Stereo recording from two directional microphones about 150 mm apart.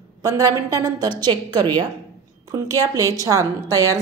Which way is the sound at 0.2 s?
25° right (ahead or behind).